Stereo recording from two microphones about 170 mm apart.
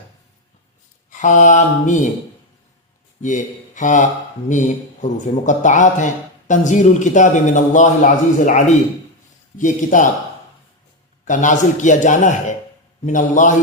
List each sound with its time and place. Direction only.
1.2 s a man's voice: 50° left (ahead or behind)
3.2 s a man's voice: 45° left (ahead or behind)
11.3 s a man's voice: 50° left (ahead or behind)